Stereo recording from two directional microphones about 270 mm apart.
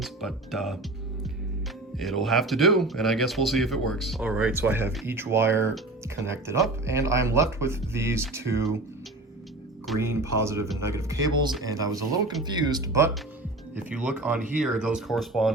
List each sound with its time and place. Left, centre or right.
0.0 s speech: centre
9.8 s music: centre
10.3 s speech: centre